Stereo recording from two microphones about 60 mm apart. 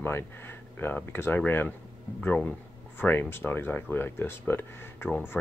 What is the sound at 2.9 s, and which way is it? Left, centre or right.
Speech, left.